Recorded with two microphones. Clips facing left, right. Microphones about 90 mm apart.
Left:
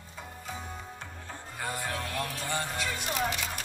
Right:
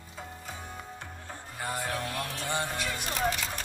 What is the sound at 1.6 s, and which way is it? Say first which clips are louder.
Music: right 1 dB; 15° right (ahead or behind).